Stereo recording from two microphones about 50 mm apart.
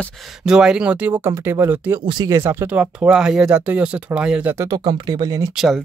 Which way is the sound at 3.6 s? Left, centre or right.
Right.